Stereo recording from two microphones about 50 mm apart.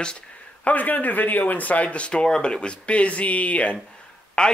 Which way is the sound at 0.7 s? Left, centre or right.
Left.